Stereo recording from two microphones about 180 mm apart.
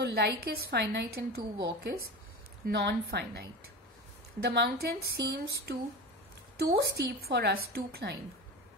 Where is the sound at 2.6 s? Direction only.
60° right (ahead or behind).